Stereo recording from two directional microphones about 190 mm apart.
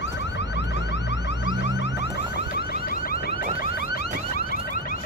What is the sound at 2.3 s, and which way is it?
Car alarm, 55° left (ahead or behind).